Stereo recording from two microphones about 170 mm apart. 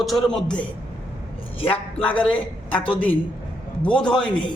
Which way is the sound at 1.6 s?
35° left (ahead or behind).